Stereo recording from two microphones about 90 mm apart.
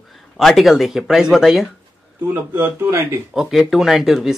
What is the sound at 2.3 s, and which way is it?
Speech, 25° right (ahead or behind).